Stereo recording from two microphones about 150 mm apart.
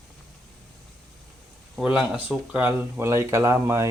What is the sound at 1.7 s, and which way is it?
Speech, 5° right (ahead or behind).